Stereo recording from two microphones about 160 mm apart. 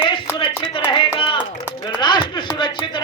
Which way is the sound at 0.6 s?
30° left (ahead or behind).